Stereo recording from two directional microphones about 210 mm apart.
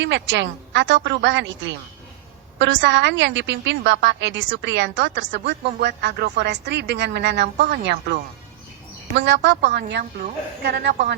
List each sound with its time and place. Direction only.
0.0 s a woman's voice: 60° right (ahead or behind)
10.0 s speech: 45° right (ahead or behind)
10.7 s a woman's voice: 60° right (ahead or behind)